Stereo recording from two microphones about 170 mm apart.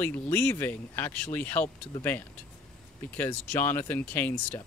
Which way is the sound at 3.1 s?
10° left (ahead or behind).